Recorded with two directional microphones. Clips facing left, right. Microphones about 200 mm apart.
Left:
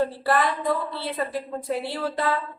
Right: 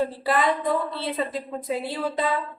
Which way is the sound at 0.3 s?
20° right (ahead or behind).